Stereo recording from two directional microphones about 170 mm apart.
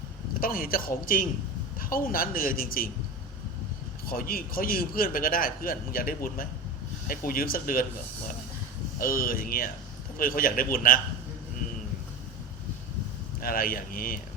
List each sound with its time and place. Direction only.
0.3 s a man's voice: 55° left (ahead or behind)
4.0 s a man's voice: 60° left (ahead or behind)
9.0 s a man's voice: 55° left (ahead or behind)
13.4 s a man's voice: 55° left (ahead or behind)